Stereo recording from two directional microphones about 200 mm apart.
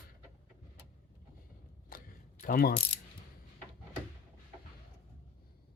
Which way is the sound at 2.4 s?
45° left (ahead or behind).